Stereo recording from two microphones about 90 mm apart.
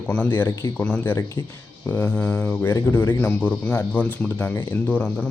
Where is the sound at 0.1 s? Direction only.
20° left (ahead or behind).